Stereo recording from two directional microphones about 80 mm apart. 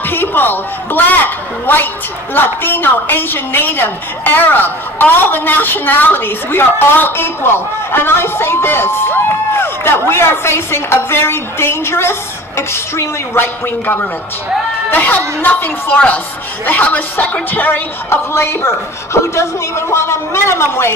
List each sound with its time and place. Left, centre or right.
0.1 s a woman's voice: left